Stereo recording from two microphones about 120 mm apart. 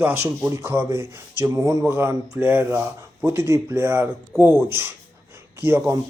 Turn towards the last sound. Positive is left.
turn(degrees=-20)  # may be behind; listen again after turning